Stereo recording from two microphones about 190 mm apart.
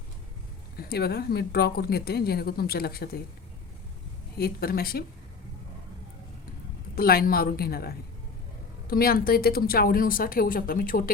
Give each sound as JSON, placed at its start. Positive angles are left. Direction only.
{"t": 0.8, "sound": "speech", "side_deg": 55}
{"t": 4.4, "sound": "speech", "side_deg": 55}
{"t": 6.9, "sound": "speech", "side_deg": 55}